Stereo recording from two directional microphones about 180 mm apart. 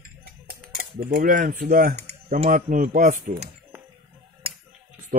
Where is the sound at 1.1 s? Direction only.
60° right (ahead or behind).